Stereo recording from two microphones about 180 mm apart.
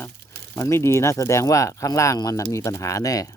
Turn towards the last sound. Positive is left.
turn(degrees=20)  # may be behind; listen again after turning